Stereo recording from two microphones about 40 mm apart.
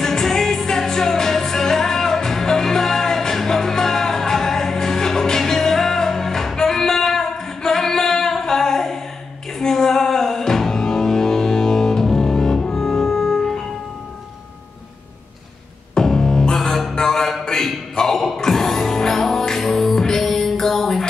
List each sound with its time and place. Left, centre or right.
0.0 s music: centre
15.9 s music: centre
17.5 s a sound: centre
17.9 s music: centre